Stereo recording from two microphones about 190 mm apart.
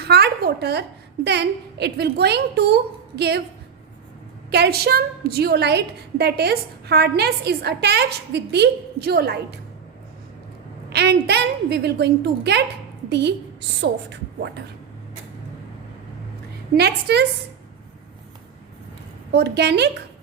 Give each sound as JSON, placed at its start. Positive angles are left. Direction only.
{"t": 0.0, "sound": "a woman's voice", "side_deg": -60}
{"t": 4.5, "sound": "a woman's voice", "side_deg": -55}
{"t": 10.8, "sound": "a woman's voice", "side_deg": -60}
{"t": 16.7, "sound": "a woman's voice", "side_deg": -60}
{"t": 19.3, "sound": "a woman's voice", "side_deg": -60}